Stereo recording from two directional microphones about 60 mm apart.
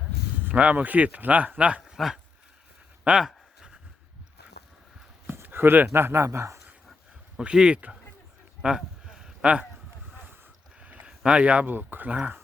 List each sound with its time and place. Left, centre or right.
0.4 s speech: right
1.8 s speech: centre
3.2 s a sound: centre
5.3 s speech: right
7.3 s speech: centre
8.6 s a sound: centre
10.8 s a sound: right
11.2 s speech: centre
11.7 s speech: right